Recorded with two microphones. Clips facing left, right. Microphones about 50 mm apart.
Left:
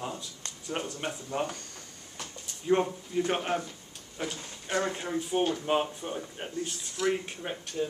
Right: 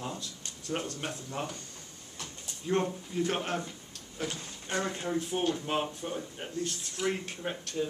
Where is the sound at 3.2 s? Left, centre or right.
Centre.